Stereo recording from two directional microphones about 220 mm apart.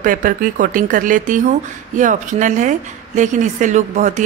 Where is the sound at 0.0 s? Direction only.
40° right (ahead or behind).